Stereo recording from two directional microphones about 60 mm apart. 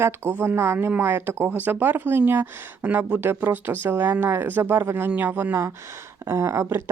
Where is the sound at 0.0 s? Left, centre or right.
Right.